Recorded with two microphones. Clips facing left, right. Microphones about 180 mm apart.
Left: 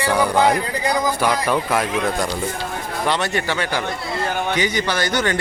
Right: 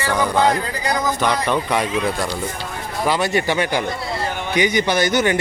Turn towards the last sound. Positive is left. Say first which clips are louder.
# right 3 dB
turn(degrees=-15)  # may be behind; listen again after turning